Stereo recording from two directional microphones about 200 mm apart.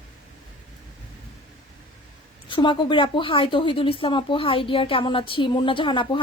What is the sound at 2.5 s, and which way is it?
A woman's voice, 25° left (ahead or behind).